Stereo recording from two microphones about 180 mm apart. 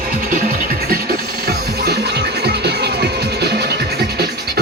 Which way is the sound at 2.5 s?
65° right (ahead or behind).